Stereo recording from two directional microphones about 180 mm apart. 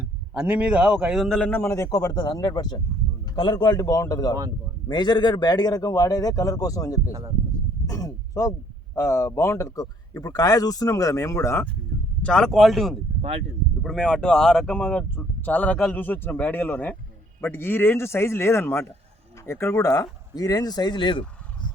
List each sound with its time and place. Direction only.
0.3 s speech: 5° right (ahead or behind); by 7.1 s 20° left (ahead or behind)
7.1 s speech: 20° right (ahead or behind)
7.9 s a sound: 20° left (ahead or behind)
9.0 s speech: 15° left (ahead or behind)
12.2 s speech: 5° left (ahead or behind); by 21.2 s 25° left (ahead or behind)